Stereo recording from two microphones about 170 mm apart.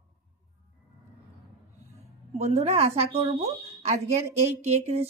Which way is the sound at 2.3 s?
40° right (ahead or behind).